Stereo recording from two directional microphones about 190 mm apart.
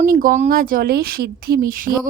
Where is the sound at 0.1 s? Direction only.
45° right (ahead or behind).